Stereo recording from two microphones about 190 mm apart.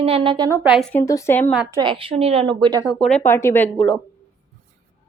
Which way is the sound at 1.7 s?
20° right (ahead or behind).